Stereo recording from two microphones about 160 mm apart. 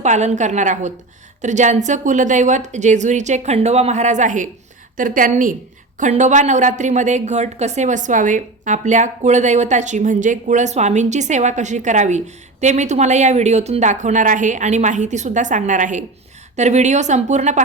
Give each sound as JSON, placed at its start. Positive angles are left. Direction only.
{"t": 0.0, "sound": "a woman's voice", "side_deg": -45}